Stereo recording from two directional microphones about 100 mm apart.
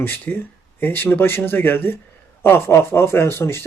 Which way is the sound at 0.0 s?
20° left (ahead or behind).